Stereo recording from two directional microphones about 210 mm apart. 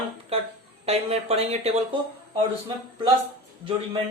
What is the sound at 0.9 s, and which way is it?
Speech, 30° right (ahead or behind).